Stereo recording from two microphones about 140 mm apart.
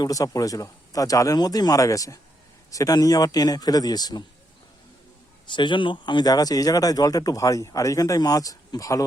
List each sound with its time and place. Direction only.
0.0 s speech: 25° left (ahead or behind)
5.5 s speech: 35° left (ahead or behind)